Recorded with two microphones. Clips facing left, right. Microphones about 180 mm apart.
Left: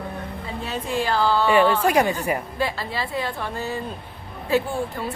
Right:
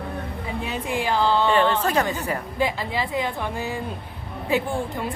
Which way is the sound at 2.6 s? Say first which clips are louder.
Right 2 dB; 15° right (ahead or behind).